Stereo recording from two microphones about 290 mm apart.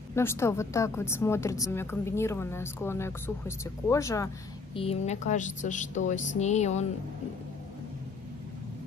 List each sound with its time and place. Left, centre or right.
0.1 s a woman's voice: centre
4.7 s speech: left